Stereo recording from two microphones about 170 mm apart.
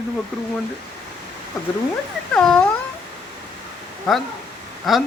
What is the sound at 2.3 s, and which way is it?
Speech, 5° left (ahead or behind).